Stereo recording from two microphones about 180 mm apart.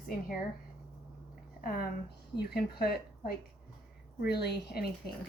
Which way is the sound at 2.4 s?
60° left (ahead or behind).